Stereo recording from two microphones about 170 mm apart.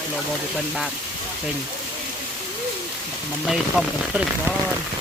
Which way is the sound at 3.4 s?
Centre (ahead or behind).